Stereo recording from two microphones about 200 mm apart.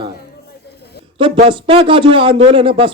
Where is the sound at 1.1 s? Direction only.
25° right (ahead or behind).